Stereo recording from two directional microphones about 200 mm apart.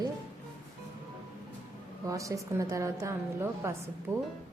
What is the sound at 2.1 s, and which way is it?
A woman's voice, 15° right (ahead or behind).